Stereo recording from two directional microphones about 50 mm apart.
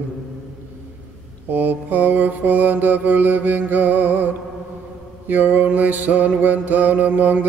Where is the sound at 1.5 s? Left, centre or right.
Right.